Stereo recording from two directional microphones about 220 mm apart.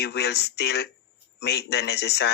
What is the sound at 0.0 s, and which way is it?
Speech, 50° left (ahead or behind).